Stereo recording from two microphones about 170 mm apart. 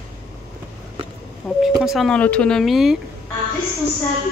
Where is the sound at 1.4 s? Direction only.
5° left (ahead or behind).